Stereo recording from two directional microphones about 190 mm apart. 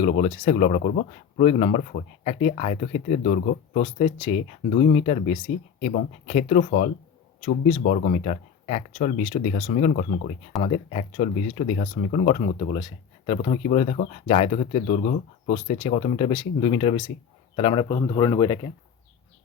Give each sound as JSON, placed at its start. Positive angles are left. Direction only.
{"t": 0.0, "sound": "speech", "side_deg": 35}
{"t": 5.8, "sound": "speech", "side_deg": 45}
{"t": 6.2, "sound": "a man's voice", "side_deg": 35}